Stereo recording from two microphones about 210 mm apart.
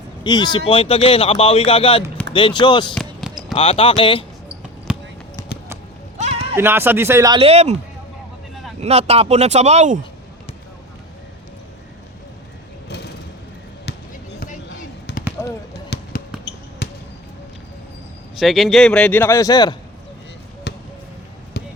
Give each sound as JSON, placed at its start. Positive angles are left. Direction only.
{"t": 0.3, "sound": "speech", "side_deg": 20}
{"t": 2.9, "sound": "basketball bounce", "side_deg": 0}
{"t": 3.5, "sound": "speech", "side_deg": 25}
{"t": 4.9, "sound": "basketball bounce", "side_deg": -5}
{"t": 6.1, "sound": "clip-clop", "side_deg": -30}
{"t": 6.6, "sound": "speech", "side_deg": -10}
{"t": 8.8, "sound": "speech", "side_deg": -30}
{"t": 13.8, "sound": "basketball bounce", "side_deg": 55}
{"t": 15.4, "sound": "a sound", "side_deg": 10}
{"t": 15.9, "sound": "basketball bounce", "side_deg": 55}
{"t": 18.3, "sound": "a man's voice", "side_deg": 0}
{"t": 20.7, "sound": "basketball bounce", "side_deg": 50}